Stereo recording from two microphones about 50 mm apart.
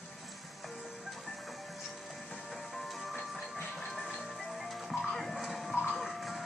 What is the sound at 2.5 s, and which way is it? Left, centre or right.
Music, centre.